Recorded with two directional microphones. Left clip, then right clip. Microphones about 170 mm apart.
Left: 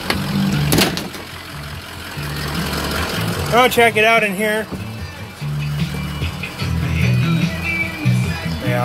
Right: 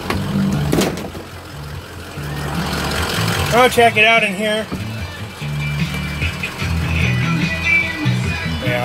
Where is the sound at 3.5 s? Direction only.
25° left (ahead or behind).